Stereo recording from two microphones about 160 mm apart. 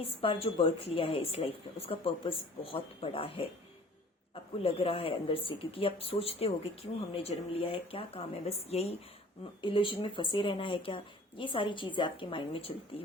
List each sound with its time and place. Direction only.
0.0 s speech: 35° left (ahead or behind)
4.6 s speech: 35° left (ahead or behind)